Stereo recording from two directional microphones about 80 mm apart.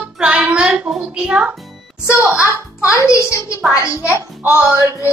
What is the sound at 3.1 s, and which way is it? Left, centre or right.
Speech, left.